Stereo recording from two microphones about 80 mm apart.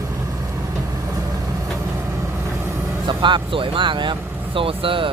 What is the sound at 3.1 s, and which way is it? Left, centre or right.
Speech, right.